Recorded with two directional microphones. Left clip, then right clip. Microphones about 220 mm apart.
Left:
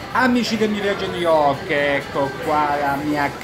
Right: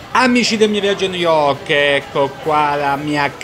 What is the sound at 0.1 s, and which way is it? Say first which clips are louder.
A man's voice: right 5 dB; 30° right (ahead or behind).